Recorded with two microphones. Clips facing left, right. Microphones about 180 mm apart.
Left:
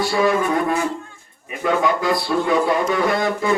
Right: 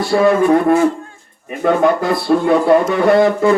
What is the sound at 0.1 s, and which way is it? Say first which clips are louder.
Speech: right 8 dB; 55° right (ahead or behind).